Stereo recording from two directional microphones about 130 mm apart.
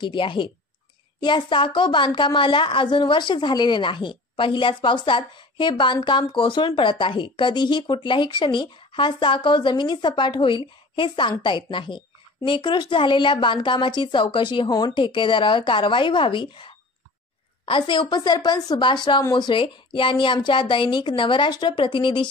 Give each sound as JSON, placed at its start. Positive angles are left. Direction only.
{"t": 0.0, "sound": "a woman's voice", "side_deg": 40}